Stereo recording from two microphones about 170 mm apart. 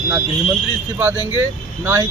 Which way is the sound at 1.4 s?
15° right (ahead or behind).